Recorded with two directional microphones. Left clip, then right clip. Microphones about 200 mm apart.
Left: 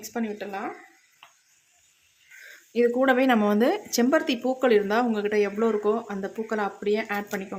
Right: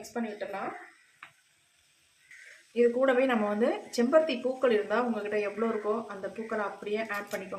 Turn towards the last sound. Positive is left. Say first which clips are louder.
# left 5 dB
turn(degrees=50)  # may be behind; listen again after turning